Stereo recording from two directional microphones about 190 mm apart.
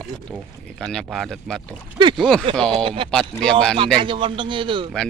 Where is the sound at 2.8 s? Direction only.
25° right (ahead or behind).